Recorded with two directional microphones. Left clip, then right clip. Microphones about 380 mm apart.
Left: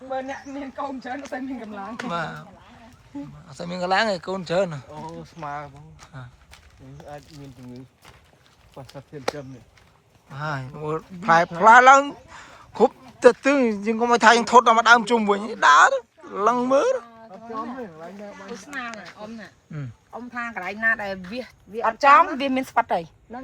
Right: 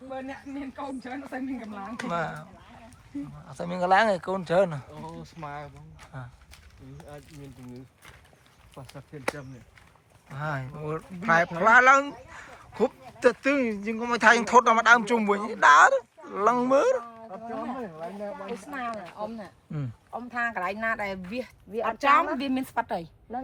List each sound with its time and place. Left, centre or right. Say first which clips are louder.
0.1 s speech: left 7 dB; left
2.0 s speech: left 1 dB; centre
5.4 s speech: left 6 dB; centre
10.2 s speech: left 3 dB; centre
17.3 s speech: left 2 dB; right; by 19.9 s centre
20.1 s speech: right 1 dB; right
20.7 s speech: left 6 dB; centre
21.8 s speech: left 7 dB; centre